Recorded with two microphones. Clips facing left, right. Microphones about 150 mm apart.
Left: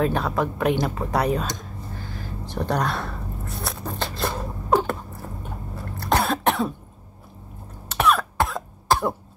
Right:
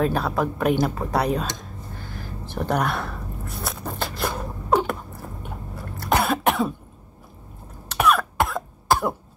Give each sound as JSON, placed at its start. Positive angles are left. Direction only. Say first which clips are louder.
{"t": 0.0, "sound": "speech", "louder": "even", "side_deg": 0}
{"t": 2.6, "sound": "a sound", "louder": "right 1 dB", "side_deg": -5}
{"t": 4.2, "sound": "beatboxing", "louder": "even", "side_deg": 0}
{"t": 5.9, "sound": "cough", "louder": "right 1 dB", "side_deg": -5}
{"t": 7.9, "sound": "cough", "louder": "right 1 dB", "side_deg": 0}